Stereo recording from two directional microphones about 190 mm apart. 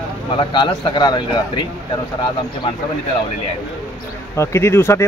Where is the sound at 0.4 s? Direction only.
25° left (ahead or behind).